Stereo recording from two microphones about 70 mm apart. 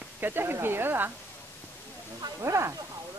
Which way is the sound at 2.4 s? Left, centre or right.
Right.